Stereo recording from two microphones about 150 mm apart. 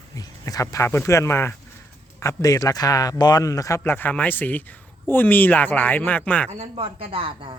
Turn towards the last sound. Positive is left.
turn(degrees=-35)  # may be behind; listen again after turning